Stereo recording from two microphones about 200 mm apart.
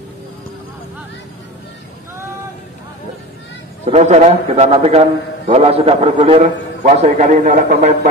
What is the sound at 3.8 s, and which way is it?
A man's voice, 35° right (ahead or behind).